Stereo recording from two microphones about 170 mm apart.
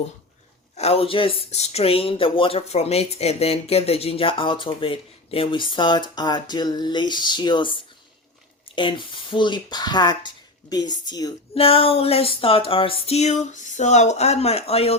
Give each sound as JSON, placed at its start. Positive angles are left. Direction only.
{"t": 0.8, "sound": "speech", "side_deg": 35}
{"t": 11.5, "sound": "speech", "side_deg": 35}